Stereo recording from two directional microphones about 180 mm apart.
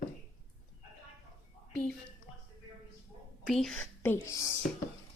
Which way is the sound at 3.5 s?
Centre (ahead or behind).